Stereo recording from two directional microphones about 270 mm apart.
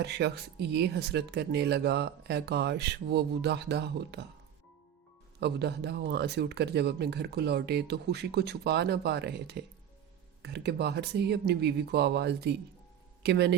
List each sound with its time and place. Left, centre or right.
0.0 s speech: right
5.4 s speech: right